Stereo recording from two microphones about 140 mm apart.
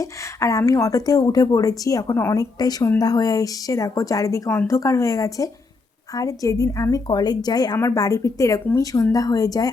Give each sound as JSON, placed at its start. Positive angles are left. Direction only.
{"t": 0.0, "sound": "a woman's voice", "side_deg": 25}
{"t": 4.4, "sound": "speech", "side_deg": 10}
{"t": 4.7, "sound": "a woman's voice", "side_deg": 20}